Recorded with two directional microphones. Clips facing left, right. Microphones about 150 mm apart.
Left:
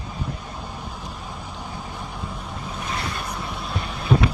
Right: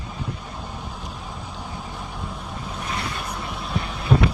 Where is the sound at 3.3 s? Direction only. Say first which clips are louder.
Even; centre (ahead or behind).